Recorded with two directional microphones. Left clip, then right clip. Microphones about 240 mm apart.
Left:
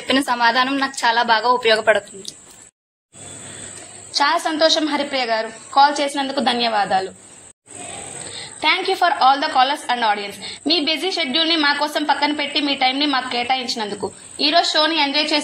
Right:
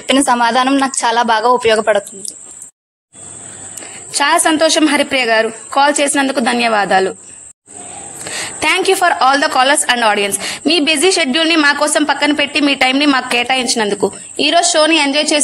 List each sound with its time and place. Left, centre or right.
0.1 s a woman's voice: right
4.2 s a woman's voice: right
8.4 s a sound: right
9.0 s a woman's voice: right